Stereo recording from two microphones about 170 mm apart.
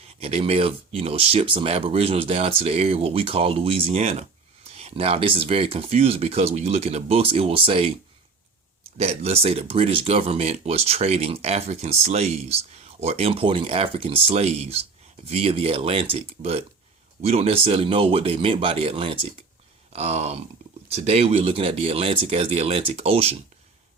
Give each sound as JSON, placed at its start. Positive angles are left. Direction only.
{"t": 0.2, "sound": "speech", "side_deg": -35}
{"t": 9.0, "sound": "speech", "side_deg": -35}